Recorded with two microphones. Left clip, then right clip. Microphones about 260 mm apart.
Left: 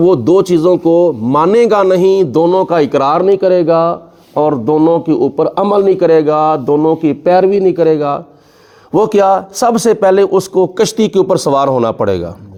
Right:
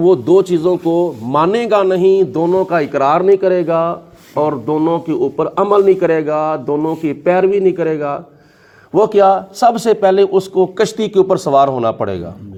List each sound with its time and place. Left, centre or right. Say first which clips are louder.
0.0 s a man's voice: left 2 dB; left